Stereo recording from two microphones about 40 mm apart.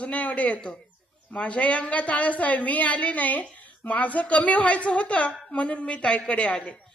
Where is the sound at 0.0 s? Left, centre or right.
Left.